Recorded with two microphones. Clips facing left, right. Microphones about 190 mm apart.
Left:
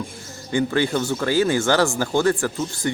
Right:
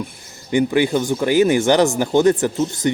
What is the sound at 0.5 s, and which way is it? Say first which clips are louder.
Speech: right 4 dB; 15° right (ahead or behind).